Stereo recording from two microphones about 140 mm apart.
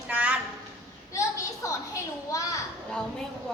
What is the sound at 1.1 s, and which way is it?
A woman's voice, 20° left (ahead or behind).